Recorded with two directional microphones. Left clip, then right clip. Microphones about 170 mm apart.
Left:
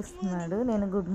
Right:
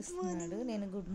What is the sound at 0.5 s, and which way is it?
Speech, centre (ahead or behind).